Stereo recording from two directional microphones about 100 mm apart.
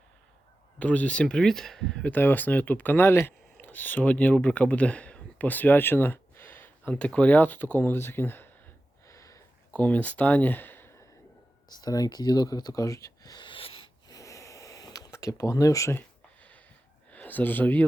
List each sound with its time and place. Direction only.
0.8 s speech: 15° left (ahead or behind)
9.0 s a sound: 30° left (ahead or behind)
9.7 s speech: 15° left (ahead or behind)
11.8 s speech: 40° left (ahead or behind); by 13.9 s 65° left (ahead or behind)
14.1 s snort: 35° left (ahead or behind)
15.1 s speech: 30° left (ahead or behind)
16.0 s a sound: 15° left (ahead or behind)